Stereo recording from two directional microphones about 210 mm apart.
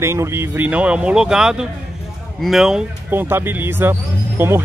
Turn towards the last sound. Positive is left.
turn(degrees=-10)  # may be behind; listen again after turning